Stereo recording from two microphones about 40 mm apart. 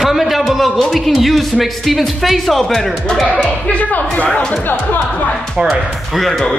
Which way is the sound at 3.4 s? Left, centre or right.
Left.